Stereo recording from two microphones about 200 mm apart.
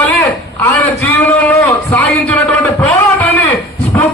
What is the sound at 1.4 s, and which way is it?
Speech, 10° left (ahead or behind).